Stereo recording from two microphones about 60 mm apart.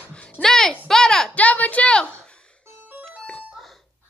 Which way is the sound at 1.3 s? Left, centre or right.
Left.